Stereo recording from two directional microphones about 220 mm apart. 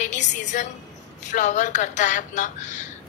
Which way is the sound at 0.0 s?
35° left (ahead or behind).